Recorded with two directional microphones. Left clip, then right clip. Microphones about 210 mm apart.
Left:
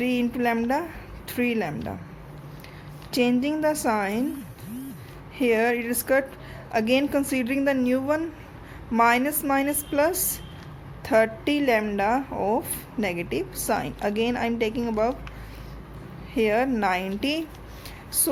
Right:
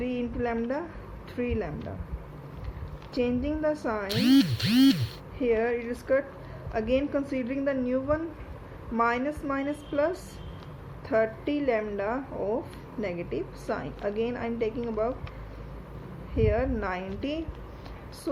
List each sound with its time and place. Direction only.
0.0 s a woman's voice: 55° left (ahead or behind)
3.1 s a woman's voice: 55° left (ahead or behind)
5.4 s a woman's voice: 60° left (ahead or behind)
16.3 s a woman's voice: 60° left (ahead or behind)